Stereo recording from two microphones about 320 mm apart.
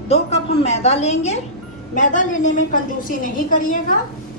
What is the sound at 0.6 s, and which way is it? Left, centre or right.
A woman's voice, centre.